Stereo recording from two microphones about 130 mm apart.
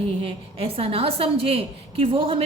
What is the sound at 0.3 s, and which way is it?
A woman's voice, 45° right (ahead or behind).